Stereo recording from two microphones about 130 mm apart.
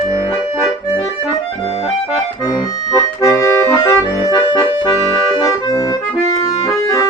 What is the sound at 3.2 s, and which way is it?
Accordion, 25° left (ahead or behind).